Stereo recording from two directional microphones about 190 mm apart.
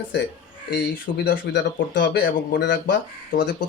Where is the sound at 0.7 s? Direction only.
60° left (ahead or behind).